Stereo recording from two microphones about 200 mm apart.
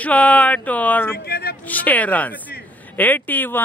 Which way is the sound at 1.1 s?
50° left (ahead or behind).